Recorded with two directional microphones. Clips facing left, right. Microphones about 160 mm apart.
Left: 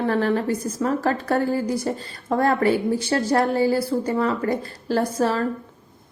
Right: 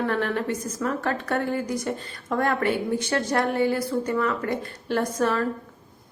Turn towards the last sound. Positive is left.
turn(degrees=30)  # may be behind; listen again after turning